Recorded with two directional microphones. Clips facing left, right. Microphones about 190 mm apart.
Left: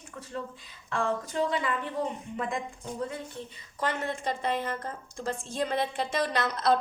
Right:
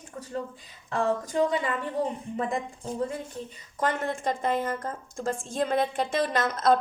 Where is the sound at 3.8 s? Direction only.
50° right (ahead or behind).